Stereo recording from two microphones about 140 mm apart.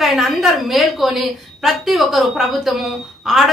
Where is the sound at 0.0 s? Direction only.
Centre (ahead or behind).